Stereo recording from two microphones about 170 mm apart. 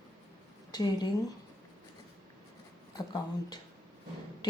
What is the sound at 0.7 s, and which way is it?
Speech, 25° left (ahead or behind).